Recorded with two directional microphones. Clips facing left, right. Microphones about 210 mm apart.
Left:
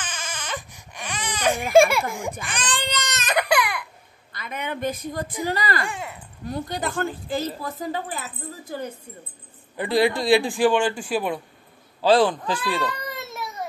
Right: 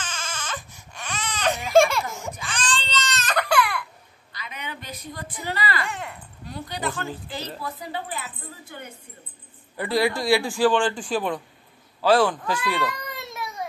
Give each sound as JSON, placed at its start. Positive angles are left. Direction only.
{"t": 0.0, "sound": "baby cry", "side_deg": 15}
{"t": 1.7, "sound": "baby laughter", "side_deg": 10}
{"t": 2.5, "sound": "baby cry", "side_deg": 15}
{"t": 4.3, "sound": "a woman's voice", "side_deg": 50}
{"t": 5.9, "sound": "speech", "side_deg": 10}
{"t": 6.4, "sound": "a woman's voice", "side_deg": 45}
{"t": 9.8, "sound": "a man's voice", "side_deg": 15}
{"t": 12.0, "sound": "speech", "side_deg": 30}